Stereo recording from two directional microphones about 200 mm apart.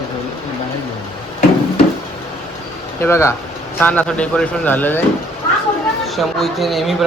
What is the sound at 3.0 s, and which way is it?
Speech, 15° left (ahead or behind).